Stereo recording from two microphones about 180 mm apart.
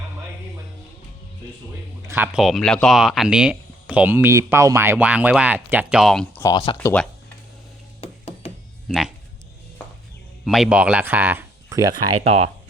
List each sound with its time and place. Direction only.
2.0 s speech: 10° right (ahead or behind)
2.4 s speech: centre (ahead or behind)
6.3 s speech: 20° left (ahead or behind)
8.0 s music: 35° left (ahead or behind)
8.9 s speech: centre (ahead or behind)
10.4 s speech: centre (ahead or behind)